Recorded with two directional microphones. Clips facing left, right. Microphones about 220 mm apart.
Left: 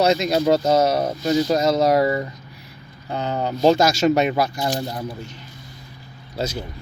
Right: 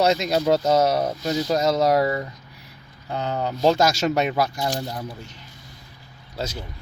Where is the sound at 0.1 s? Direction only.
Centre (ahead or behind).